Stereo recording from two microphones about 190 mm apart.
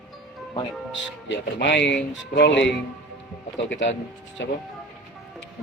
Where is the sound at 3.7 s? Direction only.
75° left (ahead or behind).